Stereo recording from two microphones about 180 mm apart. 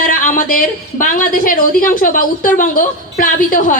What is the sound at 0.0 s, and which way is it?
A woman's voice, 50° left (ahead or behind).